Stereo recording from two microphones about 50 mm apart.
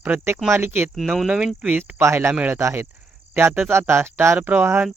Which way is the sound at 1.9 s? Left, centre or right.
Right.